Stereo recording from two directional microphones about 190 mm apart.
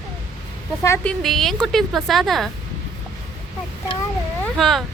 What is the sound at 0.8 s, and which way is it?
Speech, 15° left (ahead or behind).